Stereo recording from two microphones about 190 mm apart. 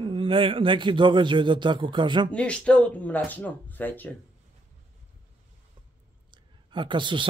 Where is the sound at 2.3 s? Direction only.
5° left (ahead or behind).